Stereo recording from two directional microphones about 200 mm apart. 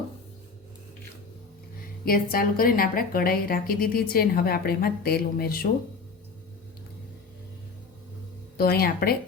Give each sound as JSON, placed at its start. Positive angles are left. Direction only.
{"t": 2.0, "sound": "a woman's voice", "side_deg": 45}
{"t": 8.5, "sound": "a woman's voice", "side_deg": 50}